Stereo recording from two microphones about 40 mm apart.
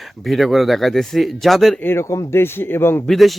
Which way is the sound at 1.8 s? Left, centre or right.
Left.